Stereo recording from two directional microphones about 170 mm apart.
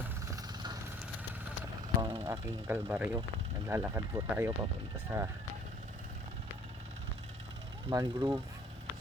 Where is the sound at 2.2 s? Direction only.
15° right (ahead or behind).